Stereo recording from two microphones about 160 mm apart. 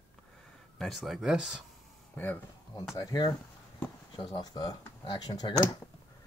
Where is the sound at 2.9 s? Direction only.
25° left (ahead or behind).